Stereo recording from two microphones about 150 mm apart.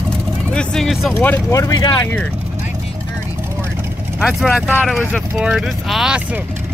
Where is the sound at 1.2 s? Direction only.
15° left (ahead or behind).